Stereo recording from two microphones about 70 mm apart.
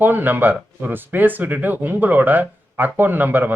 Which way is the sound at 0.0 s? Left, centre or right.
Right.